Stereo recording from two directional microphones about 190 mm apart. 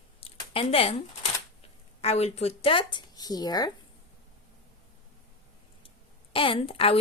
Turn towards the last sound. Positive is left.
turn(degrees=30)  # may be behind; listen again after turning